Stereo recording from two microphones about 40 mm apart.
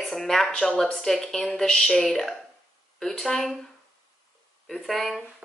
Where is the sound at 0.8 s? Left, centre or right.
Centre.